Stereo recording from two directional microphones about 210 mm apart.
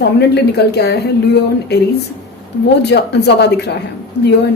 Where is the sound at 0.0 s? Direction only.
50° left (ahead or behind).